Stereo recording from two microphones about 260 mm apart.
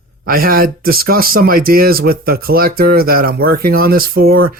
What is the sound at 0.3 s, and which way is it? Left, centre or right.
Speech, right.